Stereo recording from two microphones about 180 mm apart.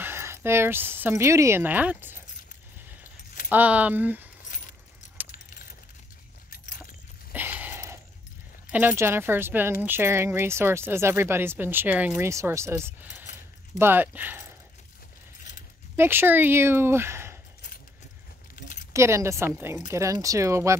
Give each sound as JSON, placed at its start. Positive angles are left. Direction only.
{"t": 0.0, "sound": "speech", "side_deg": -15}
{"t": 3.4, "sound": "speech", "side_deg": -10}
{"t": 7.3, "sound": "a sound", "side_deg": -10}
{"t": 8.6, "sound": "speech", "side_deg": -10}
{"t": 16.0, "sound": "speech", "side_deg": -10}
{"t": 18.6, "sound": "keys jangling", "side_deg": 45}
{"t": 18.9, "sound": "speech", "side_deg": -15}